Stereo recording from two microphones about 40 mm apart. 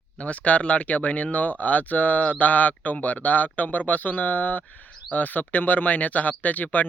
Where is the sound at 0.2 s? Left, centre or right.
Left.